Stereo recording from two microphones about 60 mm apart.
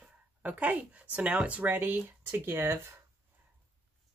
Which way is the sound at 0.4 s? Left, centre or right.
Right.